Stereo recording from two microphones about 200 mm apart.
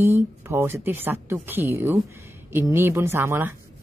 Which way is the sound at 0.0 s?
15° right (ahead or behind).